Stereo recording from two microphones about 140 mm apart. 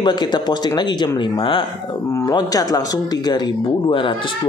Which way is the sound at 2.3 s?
25° left (ahead or behind).